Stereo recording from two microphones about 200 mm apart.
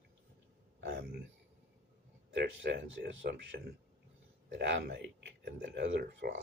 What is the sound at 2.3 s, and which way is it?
Speech, 60° right (ahead or behind).